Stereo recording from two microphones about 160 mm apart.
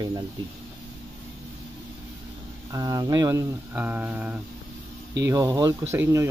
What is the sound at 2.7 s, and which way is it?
Speech, 25° right (ahead or behind).